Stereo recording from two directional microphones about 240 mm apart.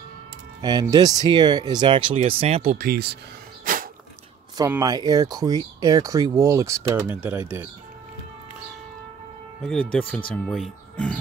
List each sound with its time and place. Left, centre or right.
0.6 s speech: centre
2.9 s speech: right
3.6 s dog: right
4.6 s speech: centre
9.6 s speech: centre